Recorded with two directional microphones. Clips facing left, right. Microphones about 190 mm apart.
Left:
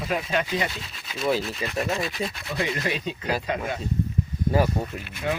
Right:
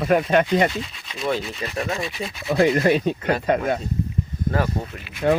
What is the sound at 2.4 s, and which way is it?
Speech, 60° right (ahead or behind).